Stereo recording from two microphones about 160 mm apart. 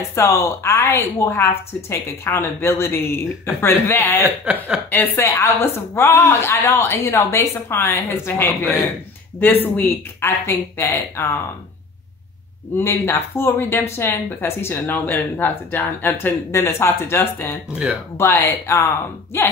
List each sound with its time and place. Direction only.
0.1 s speech: 20° left (ahead or behind)
12.7 s speech: 15° left (ahead or behind)